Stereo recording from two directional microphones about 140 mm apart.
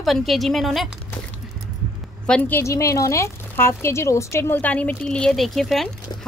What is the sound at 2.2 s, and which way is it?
A woman's voice, 10° left (ahead or behind).